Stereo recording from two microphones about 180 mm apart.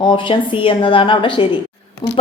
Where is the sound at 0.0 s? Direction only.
25° left (ahead or behind).